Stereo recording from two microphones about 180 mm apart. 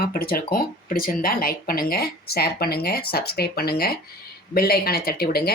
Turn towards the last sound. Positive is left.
turn(degrees=60)  # may be behind; listen again after turning